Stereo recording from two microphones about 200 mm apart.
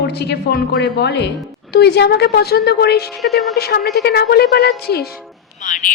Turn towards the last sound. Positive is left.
turn(degrees=40)  # may be behind; listen again after turning